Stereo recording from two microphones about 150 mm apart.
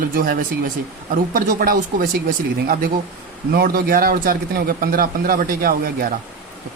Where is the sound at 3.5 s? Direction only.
85° right.